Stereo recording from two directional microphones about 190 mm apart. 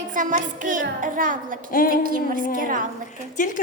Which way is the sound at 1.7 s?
50° left (ahead or behind).